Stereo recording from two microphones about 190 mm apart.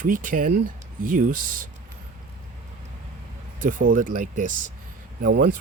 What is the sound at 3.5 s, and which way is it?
Speech, 45° right (ahead or behind).